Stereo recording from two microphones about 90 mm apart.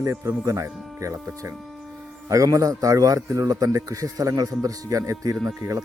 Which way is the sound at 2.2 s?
40° right (ahead or behind).